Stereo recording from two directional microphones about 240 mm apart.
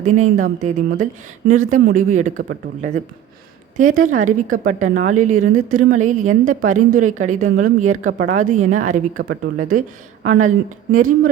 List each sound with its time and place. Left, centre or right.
0.0 s a woman's voice: right